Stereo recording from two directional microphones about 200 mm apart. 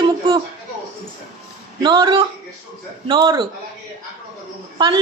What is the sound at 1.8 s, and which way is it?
A woman's voice, 20° right (ahead or behind).